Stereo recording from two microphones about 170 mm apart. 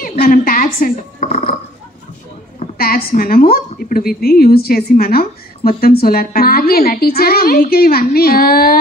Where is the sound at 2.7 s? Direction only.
60° left (ahead or behind).